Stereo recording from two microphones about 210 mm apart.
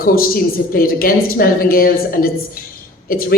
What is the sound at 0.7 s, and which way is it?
A man's voice, 45° left (ahead or behind).